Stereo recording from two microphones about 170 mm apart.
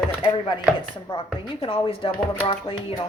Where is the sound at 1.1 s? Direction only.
30° left (ahead or behind).